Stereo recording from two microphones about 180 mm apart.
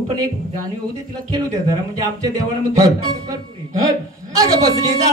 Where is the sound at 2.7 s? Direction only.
20° right (ahead or behind).